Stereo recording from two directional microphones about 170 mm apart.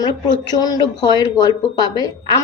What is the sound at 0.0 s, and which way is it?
A woman's voice, 25° left (ahead or behind).